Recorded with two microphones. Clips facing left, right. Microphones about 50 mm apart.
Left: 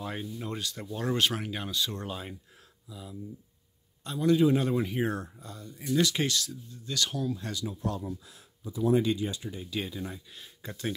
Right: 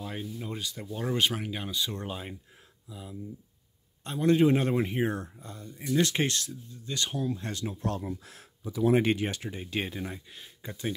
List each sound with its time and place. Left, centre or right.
0.0 s speech: centre
0.6 s speech: centre
1.7 s speech: centre
4.0 s a man's voice: right
4.7 s a man's voice: right
6.5 s speech: right
7.5 s speech: right
8.9 s speech: right
9.5 s a man's voice: right
10.0 s speech: right